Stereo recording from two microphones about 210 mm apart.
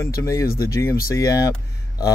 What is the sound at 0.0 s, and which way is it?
Speech, 15° left (ahead or behind).